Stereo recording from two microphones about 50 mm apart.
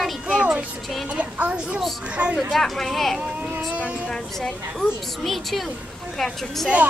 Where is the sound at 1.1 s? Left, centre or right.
Right.